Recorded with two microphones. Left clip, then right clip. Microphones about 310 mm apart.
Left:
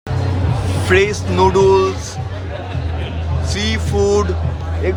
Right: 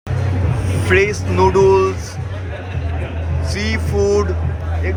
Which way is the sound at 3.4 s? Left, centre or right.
Centre.